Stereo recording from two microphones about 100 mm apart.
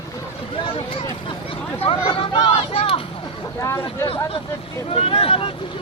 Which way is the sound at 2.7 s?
75° left (ahead or behind).